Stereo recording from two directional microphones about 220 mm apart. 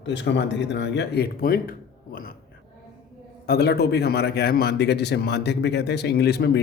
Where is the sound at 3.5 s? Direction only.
45° left (ahead or behind).